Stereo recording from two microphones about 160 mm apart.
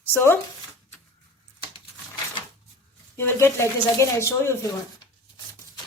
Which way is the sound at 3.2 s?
15° left (ahead or behind).